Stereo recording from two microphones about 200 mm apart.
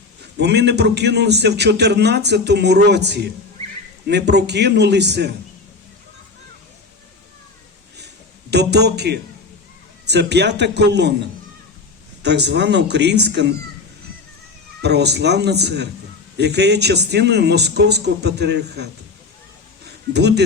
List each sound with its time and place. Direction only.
0.3 s a man's voice: 55° right (ahead or behind)
7.9 s a sound: 55° right (ahead or behind)
10.1 s a man's voice: 55° right (ahead or behind)
12.2 s a man's voice: 55° right (ahead or behind)
14.8 s a man's voice: 55° right (ahead or behind)
19.8 s a sound: 55° right (ahead or behind)